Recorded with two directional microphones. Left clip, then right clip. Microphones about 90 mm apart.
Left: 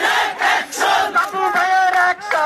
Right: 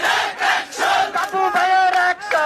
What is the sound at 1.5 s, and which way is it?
Music, 15° right (ahead or behind).